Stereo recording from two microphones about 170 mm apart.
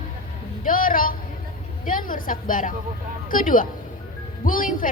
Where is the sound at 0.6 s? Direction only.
55° left (ahead or behind).